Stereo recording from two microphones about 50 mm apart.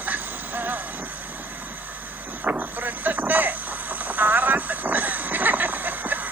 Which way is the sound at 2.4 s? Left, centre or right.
Right.